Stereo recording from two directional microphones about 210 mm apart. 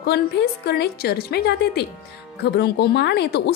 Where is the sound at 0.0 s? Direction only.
50° left (ahead or behind).